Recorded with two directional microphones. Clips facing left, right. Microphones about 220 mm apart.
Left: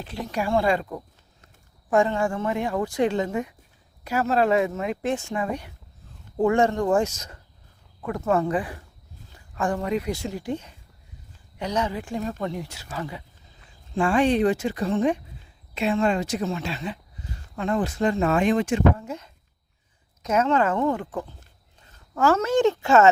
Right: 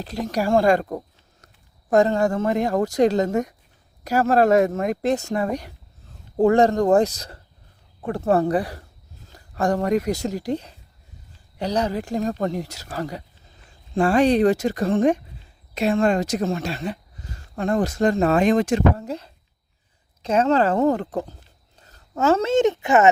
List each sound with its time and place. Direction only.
0.0 s speech: 40° right (ahead or behind)
21.8 s a sound: 40° right (ahead or behind)
22.1 s speech: 25° right (ahead or behind)